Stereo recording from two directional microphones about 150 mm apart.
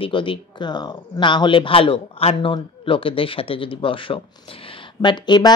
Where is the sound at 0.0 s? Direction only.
35° left (ahead or behind).